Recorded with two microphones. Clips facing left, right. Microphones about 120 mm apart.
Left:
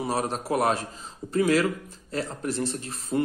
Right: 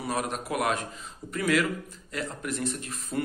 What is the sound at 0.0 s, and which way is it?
Speech, 35° left (ahead or behind).